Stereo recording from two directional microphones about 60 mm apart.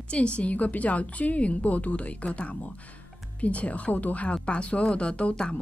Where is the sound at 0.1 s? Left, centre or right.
Centre.